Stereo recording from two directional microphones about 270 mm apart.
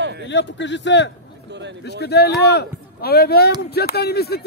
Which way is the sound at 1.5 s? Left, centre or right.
Right.